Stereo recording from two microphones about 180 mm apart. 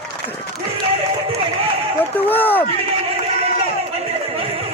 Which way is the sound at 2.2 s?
10° left (ahead or behind).